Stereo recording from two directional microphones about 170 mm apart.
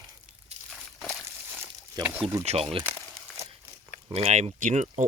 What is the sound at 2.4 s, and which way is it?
Speech, 35° right (ahead or behind).